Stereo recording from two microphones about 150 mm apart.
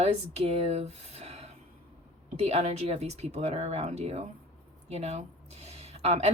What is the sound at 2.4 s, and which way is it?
Speech, 45° right (ahead or behind).